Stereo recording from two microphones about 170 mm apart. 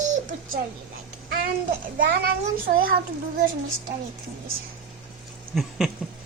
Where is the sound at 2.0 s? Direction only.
60° right (ahead or behind).